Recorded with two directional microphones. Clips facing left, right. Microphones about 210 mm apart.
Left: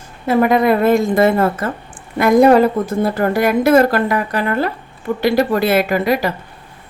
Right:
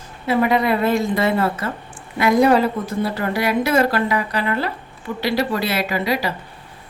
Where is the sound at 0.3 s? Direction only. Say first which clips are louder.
Left 5 dB; 45° left (ahead or behind).